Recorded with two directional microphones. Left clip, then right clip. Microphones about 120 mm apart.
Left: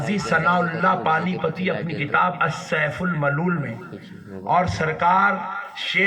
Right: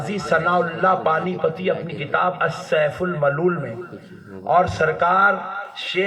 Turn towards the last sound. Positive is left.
turn(degrees=-30)  # may be behind; listen again after turning